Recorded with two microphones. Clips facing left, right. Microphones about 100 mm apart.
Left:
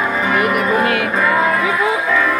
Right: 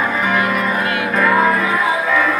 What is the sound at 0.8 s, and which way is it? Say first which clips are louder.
Music: left 3 dB; 60° left (ahead or behind).